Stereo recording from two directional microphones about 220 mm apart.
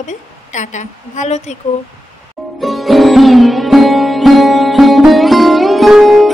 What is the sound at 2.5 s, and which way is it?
Music, centre (ahead or behind).